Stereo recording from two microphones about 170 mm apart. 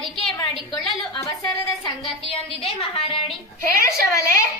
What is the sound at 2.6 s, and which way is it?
Speech, 35° left (ahead or behind).